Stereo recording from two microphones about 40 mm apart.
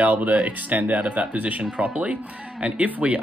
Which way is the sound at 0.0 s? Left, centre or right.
Right.